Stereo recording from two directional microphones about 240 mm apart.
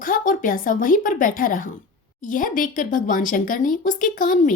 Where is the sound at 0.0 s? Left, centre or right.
Left.